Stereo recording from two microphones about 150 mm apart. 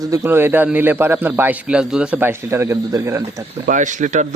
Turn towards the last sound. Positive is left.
turn(degrees=-55)  # may be behind; listen again after turning